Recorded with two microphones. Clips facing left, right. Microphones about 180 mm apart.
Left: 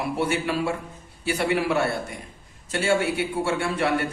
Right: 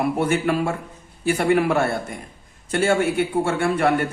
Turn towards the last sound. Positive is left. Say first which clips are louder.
# right 4 dB
turn(degrees=-50)  # may be behind; listen again after turning